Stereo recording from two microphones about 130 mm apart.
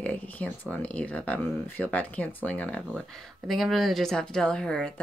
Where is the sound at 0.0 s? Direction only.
10° left (ahead or behind).